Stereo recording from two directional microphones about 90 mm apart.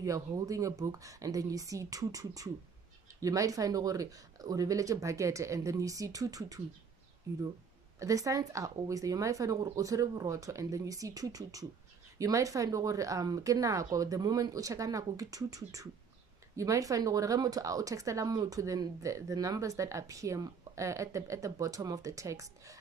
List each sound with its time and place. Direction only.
0.0 s speech: 40° right (ahead or behind)